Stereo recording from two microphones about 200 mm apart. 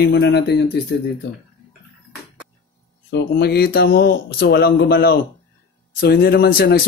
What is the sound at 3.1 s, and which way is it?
Speech, 55° left (ahead or behind).